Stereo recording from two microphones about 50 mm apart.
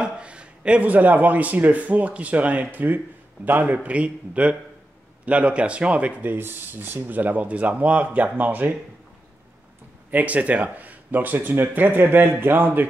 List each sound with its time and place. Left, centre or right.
0.2 s speech: right
3.7 s a man's voice: right
10.1 s speech: right